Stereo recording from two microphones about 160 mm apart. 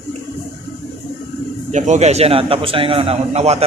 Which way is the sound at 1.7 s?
45° right (ahead or behind).